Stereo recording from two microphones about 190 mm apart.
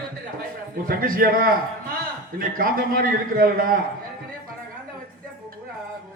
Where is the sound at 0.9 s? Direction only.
50° right (ahead or behind).